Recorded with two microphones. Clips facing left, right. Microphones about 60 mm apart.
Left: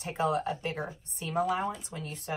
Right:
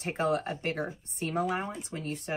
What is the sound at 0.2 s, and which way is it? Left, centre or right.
Speech, right.